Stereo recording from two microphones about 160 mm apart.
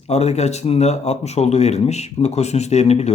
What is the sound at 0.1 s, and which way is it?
A man's voice, 45° left (ahead or behind).